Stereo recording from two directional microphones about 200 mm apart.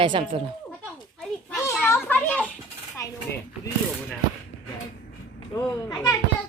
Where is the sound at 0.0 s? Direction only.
25° right (ahead or behind).